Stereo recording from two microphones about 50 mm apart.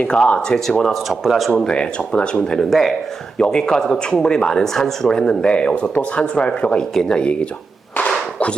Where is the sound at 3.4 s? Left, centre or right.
Centre.